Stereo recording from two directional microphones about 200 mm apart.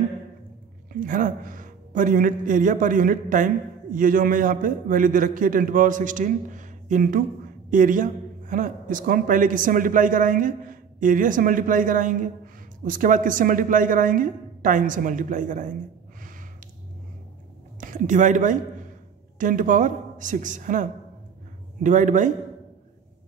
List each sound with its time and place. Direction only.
0.9 s a man's voice: 40° right (ahead or behind)
17.7 s a man's voice: 40° right (ahead or behind)